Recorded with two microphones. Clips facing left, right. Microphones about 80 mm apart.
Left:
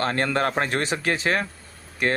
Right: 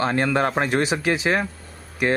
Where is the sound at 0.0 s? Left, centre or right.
Centre.